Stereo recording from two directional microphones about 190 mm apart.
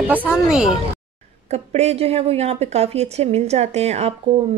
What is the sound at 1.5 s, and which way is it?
A woman's voice, 35° right (ahead or behind).